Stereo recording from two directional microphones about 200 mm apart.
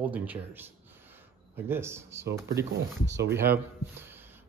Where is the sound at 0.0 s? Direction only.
10° right (ahead or behind).